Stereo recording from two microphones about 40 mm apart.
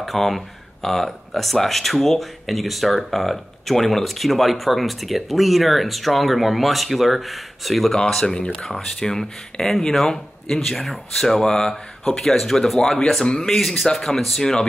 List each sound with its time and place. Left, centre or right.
0.0 s speech: centre
13.2 s a man's voice: left
13.5 s speech: centre